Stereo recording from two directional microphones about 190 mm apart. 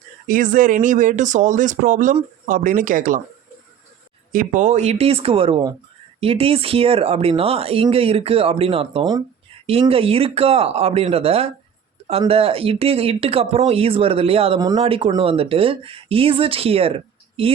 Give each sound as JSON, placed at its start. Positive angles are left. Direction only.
{"t": 0.3, "sound": "speech", "side_deg": -45}
{"t": 4.3, "sound": "speech", "side_deg": -45}